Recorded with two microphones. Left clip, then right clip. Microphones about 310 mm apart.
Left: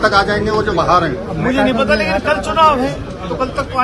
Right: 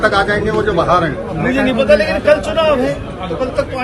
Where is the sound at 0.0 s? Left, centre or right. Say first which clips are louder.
Even; left.